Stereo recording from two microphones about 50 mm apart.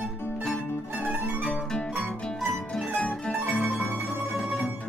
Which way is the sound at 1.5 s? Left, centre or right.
Left.